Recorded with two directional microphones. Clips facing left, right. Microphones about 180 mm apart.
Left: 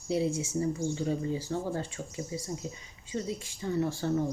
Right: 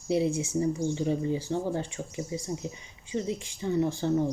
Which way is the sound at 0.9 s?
20° right (ahead or behind).